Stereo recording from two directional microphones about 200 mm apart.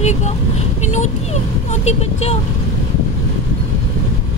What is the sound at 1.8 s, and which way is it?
Speech, 30° left (ahead or behind).